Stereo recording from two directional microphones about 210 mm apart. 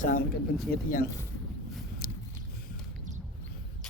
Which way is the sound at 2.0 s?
40° left (ahead or behind).